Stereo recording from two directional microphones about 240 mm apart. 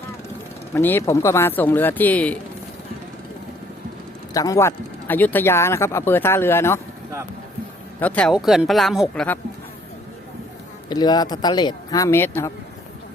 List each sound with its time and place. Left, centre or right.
0.7 s speech: centre
4.4 s speech: centre
7.9 s speech: centre
10.8 s speech: centre